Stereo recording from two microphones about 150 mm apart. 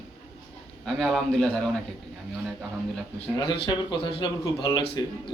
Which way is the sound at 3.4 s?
30° left (ahead or behind).